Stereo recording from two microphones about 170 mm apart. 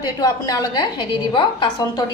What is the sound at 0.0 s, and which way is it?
A woman's voice, 20° left (ahead or behind).